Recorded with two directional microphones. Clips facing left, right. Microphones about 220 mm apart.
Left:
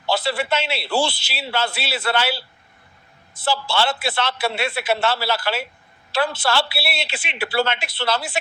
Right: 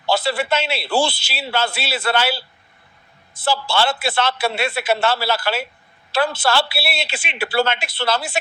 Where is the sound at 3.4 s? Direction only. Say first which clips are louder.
Right 2 dB; 45° right (ahead or behind).